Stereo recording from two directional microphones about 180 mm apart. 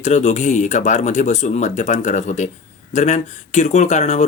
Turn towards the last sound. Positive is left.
turn(degrees=40)  # may be behind; listen again after turning